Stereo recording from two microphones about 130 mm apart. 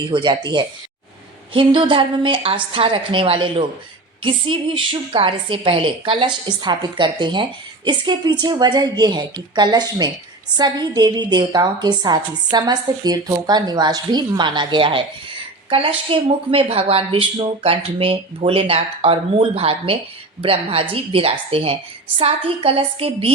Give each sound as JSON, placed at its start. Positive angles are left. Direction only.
{"t": 0.0, "sound": "a woman's voice", "side_deg": -40}